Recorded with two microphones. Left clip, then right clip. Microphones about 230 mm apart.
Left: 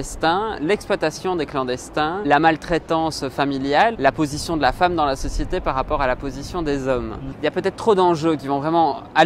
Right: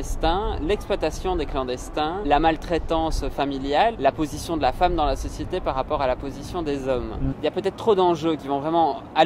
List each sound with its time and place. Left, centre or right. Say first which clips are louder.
0.2 s speech: left 4 dB; left